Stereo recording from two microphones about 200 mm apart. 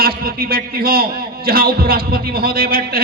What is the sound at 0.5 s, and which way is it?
A man's voice, 50° right (ahead or behind).